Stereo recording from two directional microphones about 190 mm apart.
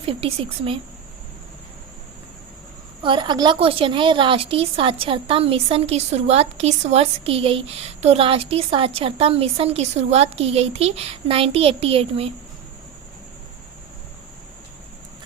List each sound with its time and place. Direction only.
0.0 s speech: 30° right (ahead or behind)
3.0 s a woman's voice: 25° right (ahead or behind)